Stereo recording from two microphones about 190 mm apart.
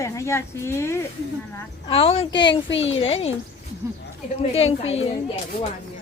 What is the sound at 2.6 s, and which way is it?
Speech, 80° left.